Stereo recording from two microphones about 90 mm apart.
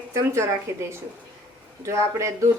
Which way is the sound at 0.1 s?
30° right (ahead or behind).